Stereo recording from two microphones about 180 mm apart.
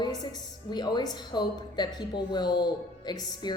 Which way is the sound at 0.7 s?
25° left (ahead or behind).